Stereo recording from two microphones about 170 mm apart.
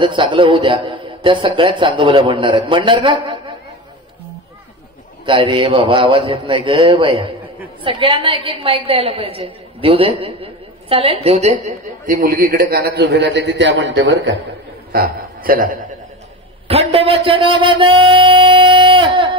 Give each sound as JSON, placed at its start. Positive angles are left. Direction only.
{"t": 0.0, "sound": "a man's voice", "side_deg": -30}
{"t": 5.2, "sound": "a woman's voice", "side_deg": -30}
{"t": 14.9, "sound": "a man's voice", "side_deg": -60}
{"t": 16.6, "sound": "a man's voice", "side_deg": -35}